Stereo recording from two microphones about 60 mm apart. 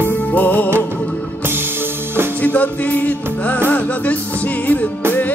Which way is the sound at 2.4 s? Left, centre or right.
Left.